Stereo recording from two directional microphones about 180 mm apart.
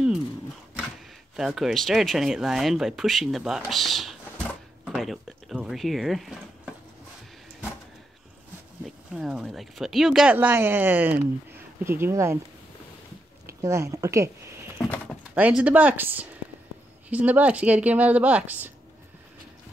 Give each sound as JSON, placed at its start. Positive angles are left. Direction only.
{"t": 1.3, "sound": "speech", "side_deg": 0}
{"t": 4.8, "sound": "a sound", "side_deg": 0}
{"t": 8.8, "sound": "speech", "side_deg": -5}
{"t": 13.6, "sound": "speech", "side_deg": -15}
{"t": 15.3, "sound": "speech", "side_deg": -10}